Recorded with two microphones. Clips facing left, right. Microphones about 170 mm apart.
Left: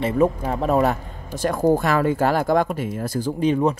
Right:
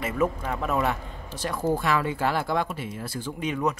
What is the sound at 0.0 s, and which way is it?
Speech, 30° left (ahead or behind).